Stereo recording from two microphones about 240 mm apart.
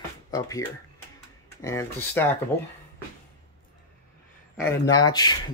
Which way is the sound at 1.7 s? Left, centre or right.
Centre.